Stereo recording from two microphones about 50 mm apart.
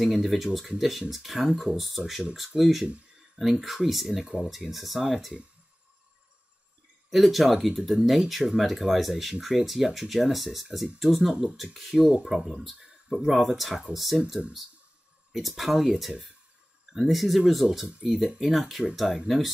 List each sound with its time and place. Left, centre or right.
0.1 s speech: centre
7.1 s speech: centre
12.4 s speech: centre
13.1 s speech: centre
15.3 s speech: centre
17.8 s speech: right
18.4 s speech: centre